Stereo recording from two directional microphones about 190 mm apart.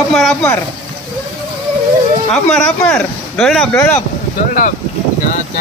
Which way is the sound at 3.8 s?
15° left (ahead or behind).